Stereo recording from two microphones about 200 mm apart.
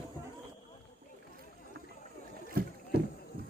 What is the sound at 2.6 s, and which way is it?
Rowboat, 45° right (ahead or behind).